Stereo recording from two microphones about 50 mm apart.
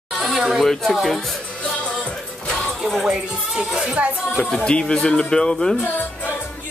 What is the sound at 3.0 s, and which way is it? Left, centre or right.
Speech, centre.